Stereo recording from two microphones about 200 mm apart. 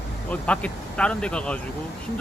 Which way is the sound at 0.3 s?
5° left (ahead or behind).